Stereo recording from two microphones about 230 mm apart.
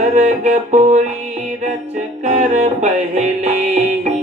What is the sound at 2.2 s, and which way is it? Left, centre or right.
Music, right.